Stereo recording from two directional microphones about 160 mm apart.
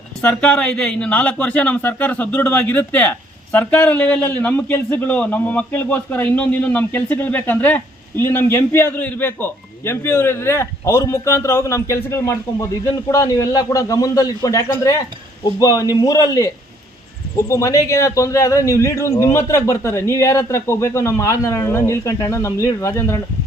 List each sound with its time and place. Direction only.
0.2 s a man's voice: 5° left (ahead or behind)
17.5 s a man's voice: 20° left (ahead or behind)